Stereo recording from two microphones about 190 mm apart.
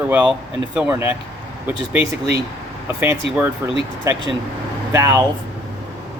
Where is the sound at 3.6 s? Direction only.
15° right (ahead or behind).